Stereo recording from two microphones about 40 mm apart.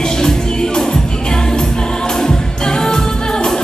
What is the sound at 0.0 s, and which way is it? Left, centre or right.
Music, centre.